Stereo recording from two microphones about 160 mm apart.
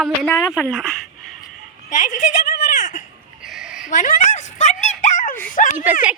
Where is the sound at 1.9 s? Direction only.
50° left (ahead or behind).